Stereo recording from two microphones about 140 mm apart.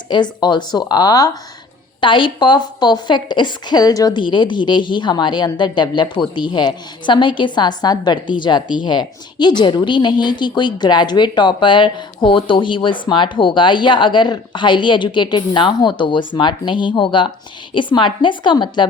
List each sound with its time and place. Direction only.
0.1 s a woman's voice: 30° left (ahead or behind)